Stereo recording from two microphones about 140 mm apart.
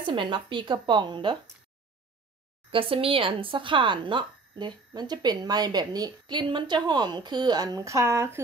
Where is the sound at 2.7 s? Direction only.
40° right (ahead or behind).